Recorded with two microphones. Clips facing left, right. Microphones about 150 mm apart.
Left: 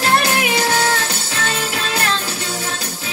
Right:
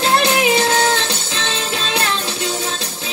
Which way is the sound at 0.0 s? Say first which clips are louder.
Right 2 dB; 25° right (ahead or behind).